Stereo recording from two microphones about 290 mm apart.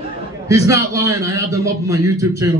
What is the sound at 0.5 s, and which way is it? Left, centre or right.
A man's voice, centre.